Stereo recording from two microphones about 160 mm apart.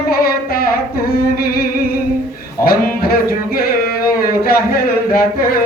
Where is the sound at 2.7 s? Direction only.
70° left (ahead or behind).